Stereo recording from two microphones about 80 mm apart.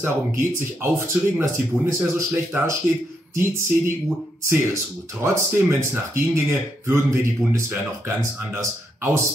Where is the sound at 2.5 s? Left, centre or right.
Centre.